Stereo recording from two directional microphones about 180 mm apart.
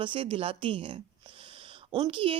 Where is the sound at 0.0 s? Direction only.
30° right (ahead or behind).